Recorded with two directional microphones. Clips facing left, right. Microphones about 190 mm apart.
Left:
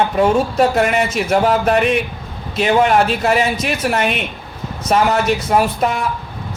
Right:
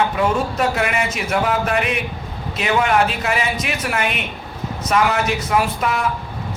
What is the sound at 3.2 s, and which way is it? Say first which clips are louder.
Speech: left 5 dB; 40° left (ahead or behind).